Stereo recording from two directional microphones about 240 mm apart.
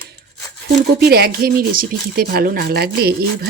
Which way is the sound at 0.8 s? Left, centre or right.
Right.